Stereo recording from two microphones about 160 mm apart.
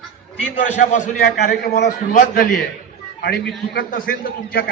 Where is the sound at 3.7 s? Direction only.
65° left (ahead or behind).